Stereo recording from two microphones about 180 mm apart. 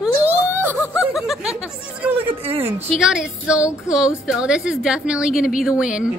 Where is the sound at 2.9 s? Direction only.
Centre (ahead or behind).